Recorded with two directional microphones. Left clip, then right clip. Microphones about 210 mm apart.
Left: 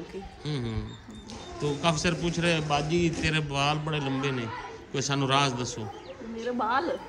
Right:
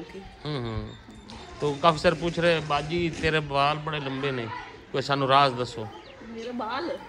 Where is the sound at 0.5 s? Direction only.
5° left (ahead or behind).